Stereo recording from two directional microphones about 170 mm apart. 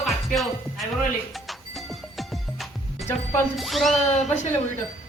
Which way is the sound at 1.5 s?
Centre (ahead or behind).